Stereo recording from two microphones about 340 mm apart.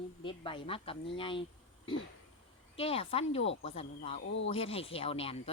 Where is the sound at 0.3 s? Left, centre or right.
Centre.